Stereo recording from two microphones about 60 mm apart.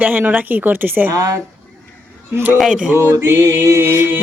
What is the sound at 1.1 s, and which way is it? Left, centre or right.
Speech, right.